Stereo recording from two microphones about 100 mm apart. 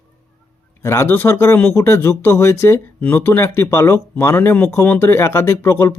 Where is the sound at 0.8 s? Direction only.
25° left (ahead or behind).